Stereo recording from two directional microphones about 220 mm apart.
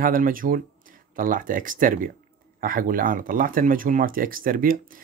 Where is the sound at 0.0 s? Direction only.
40° right (ahead or behind).